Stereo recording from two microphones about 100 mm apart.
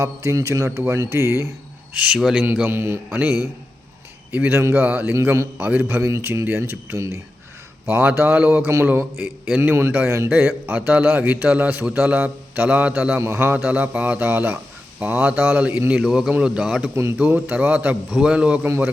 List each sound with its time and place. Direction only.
0.0 s speech: 30° right (ahead or behind)
1.9 s a man's voice: 10° right (ahead or behind)
2.4 s speech: 15° right (ahead or behind)
5.1 s speech: 30° right (ahead or behind)
5.5 s a man's voice: 15° right (ahead or behind)
6.0 s speech: 30° right (ahead or behind)
7.9 s a man's voice: 20° right (ahead or behind)
8.7 s speech: 25° right (ahead or behind)
9.1 s a man's voice: 5° right (ahead or behind)
9.6 s a man's voice: 25° right (ahead or behind)
13.2 s a man's voice: 25° right (ahead or behind); by 16.9 s 5° right (ahead or behind)
16.9 s speech: 25° right (ahead or behind)
17.2 s a man's voice: 15° right (ahead or behind)